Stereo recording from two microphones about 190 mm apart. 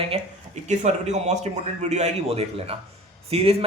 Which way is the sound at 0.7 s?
35° right (ahead or behind).